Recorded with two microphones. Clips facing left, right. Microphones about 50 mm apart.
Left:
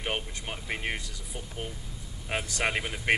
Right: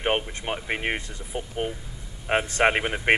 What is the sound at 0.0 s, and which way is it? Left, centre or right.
Speech, right.